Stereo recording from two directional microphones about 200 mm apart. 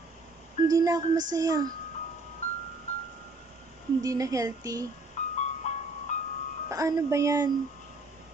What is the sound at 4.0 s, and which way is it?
Speech, 15° right (ahead or behind).